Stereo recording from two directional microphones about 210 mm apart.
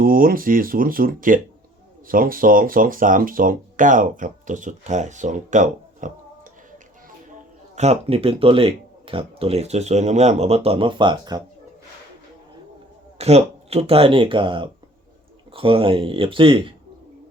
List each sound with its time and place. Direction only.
0.0 s speech: 45° right (ahead or behind)
7.8 s speech: 30° right (ahead or behind)
13.1 s speech: 30° right (ahead or behind)